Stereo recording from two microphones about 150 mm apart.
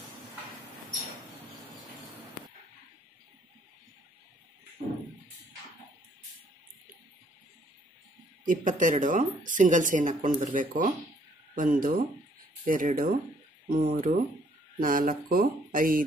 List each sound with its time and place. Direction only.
8.5 s speech: 60° right (ahead or behind)
14.8 s speech: 70° right (ahead or behind)